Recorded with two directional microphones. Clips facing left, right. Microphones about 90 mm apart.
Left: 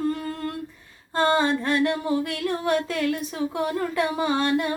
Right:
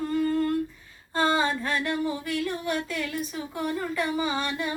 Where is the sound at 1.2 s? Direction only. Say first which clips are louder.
Left 3 dB; 50° left (ahead or behind).